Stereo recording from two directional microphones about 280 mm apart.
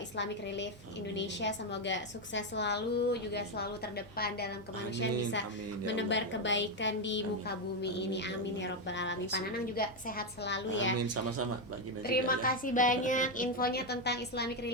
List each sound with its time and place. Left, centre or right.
0.2 s a woman's voice: left
5.8 s a woman's voice: left
10.9 s speech: right
12.0 s a woman's voice: left